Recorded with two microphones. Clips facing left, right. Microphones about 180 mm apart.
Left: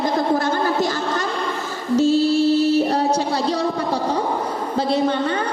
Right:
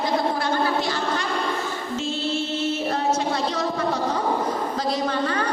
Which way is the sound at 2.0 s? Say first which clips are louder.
Left 12 dB; 40° left (ahead or behind).